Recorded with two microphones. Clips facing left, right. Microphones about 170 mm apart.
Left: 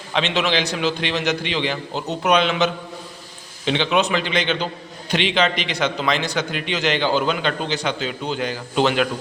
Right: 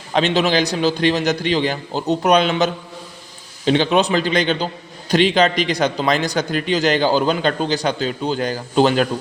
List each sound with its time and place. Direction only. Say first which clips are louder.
0.1 s a man's voice: right 4 dB; 40° right (ahead or behind)
3.7 s a man's voice: right 4 dB; 40° right (ahead or behind)